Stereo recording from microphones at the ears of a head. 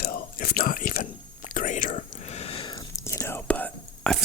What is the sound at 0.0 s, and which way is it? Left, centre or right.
Whispering, left.